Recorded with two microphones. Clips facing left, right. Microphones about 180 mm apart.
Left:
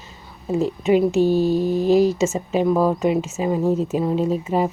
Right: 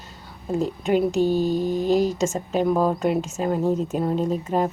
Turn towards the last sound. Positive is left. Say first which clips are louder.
# left 2 dB
turn(degrees=5)  # may be behind; listen again after turning